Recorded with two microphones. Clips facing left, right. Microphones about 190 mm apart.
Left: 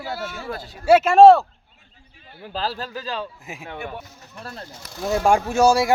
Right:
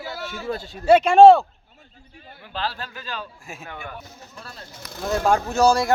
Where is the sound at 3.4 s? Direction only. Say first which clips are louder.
Left 3 dB; 20° left (ahead or behind).